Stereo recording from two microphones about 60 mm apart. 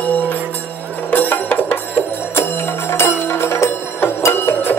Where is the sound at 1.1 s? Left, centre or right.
Left.